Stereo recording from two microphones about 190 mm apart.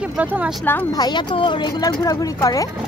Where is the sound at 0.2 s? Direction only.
10° right (ahead or behind).